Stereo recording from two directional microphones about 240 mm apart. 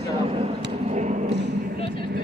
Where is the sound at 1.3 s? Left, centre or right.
Right.